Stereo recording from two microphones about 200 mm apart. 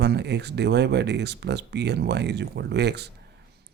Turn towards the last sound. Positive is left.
turn(degrees=-55)  # may be behind; listen again after turning